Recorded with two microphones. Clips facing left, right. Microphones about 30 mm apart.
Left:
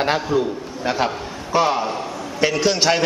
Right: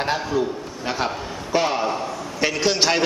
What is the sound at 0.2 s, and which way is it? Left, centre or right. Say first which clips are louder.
A man's voice: left 2 dB; centre.